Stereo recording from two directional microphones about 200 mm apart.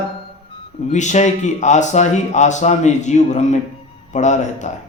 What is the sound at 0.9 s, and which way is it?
Speech, 35° left (ahead or behind).